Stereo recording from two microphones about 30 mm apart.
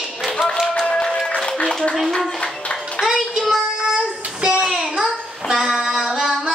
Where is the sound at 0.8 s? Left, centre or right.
Left.